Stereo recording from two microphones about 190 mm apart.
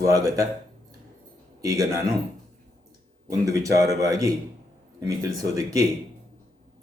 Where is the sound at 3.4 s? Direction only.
15° right (ahead or behind).